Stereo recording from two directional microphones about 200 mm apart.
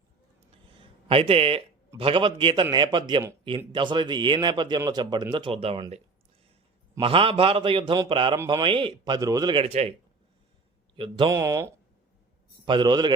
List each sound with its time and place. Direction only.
1.0 s speech: 25° right (ahead or behind)
7.0 s speech: 25° right (ahead or behind)
10.9 s speech: 25° right (ahead or behind)